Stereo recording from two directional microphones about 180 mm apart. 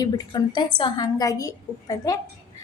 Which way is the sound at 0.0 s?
25° left (ahead or behind).